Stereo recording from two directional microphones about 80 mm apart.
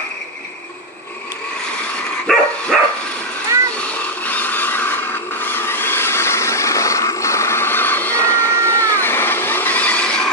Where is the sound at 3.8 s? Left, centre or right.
Centre.